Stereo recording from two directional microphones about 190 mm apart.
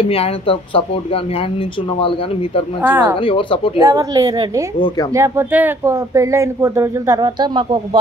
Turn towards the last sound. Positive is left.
turn(degrees=-25)  # may be behind; listen again after turning